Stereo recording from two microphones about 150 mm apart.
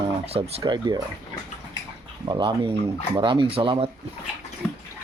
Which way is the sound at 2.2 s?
30° right (ahead or behind).